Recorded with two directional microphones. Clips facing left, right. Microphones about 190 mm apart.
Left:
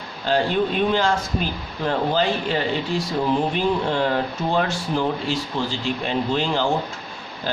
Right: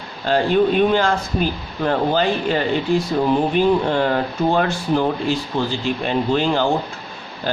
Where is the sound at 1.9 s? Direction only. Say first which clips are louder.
Right 3 dB; 55° right (ahead or behind).